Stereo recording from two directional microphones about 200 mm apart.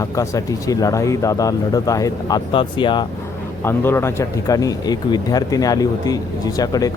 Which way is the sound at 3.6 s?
10° left (ahead or behind).